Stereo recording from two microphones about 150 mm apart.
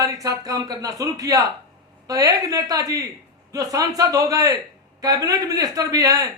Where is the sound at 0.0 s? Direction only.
20° right (ahead or behind).